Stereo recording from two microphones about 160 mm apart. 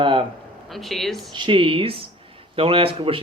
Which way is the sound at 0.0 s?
30° right (ahead or behind).